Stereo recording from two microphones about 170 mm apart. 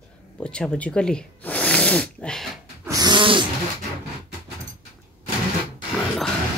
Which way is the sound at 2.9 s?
25° right (ahead or behind).